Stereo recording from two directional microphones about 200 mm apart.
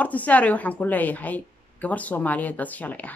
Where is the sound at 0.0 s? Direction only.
5° left (ahead or behind).